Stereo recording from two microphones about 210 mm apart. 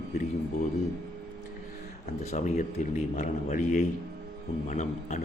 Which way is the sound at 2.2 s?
35° left (ahead or behind).